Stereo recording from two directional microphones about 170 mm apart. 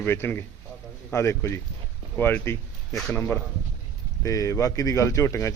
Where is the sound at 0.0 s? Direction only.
15° left (ahead or behind).